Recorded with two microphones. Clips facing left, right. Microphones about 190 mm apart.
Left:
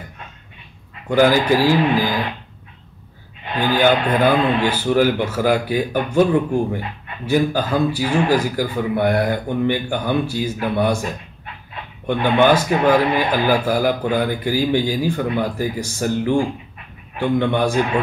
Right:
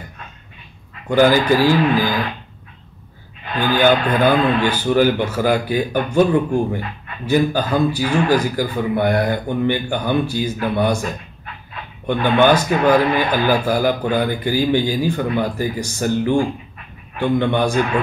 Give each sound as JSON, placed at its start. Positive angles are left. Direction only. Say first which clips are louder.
{"t": 1.0, "sound": "speech", "louder": "right 1 dB", "side_deg": 0}
{"t": 1.6, "sound": "speech", "louder": "right 1 dB", "side_deg": 30}
{"t": 3.4, "sound": "a man's voice", "louder": "even", "side_deg": 30}
{"t": 3.8, "sound": "speech", "louder": "right 1 dB", "side_deg": 0}
{"t": 12.1, "sound": "speech", "louder": "right 1 dB", "side_deg": 0}